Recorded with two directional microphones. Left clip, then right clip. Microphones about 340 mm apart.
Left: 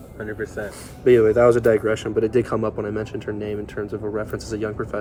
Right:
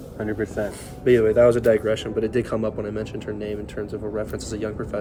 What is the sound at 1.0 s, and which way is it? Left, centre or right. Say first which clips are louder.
Speech: left 2 dB; centre.